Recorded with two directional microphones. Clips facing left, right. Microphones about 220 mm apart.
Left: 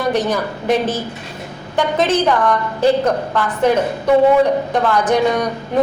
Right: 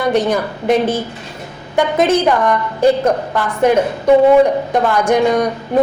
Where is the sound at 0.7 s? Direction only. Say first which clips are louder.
Right 3 dB; 55° right (ahead or behind).